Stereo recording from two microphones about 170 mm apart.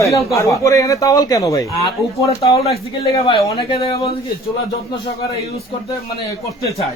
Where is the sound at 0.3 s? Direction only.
20° left (ahead or behind).